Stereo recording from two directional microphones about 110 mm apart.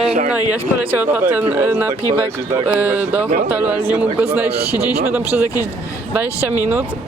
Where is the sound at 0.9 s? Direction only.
15° right (ahead or behind).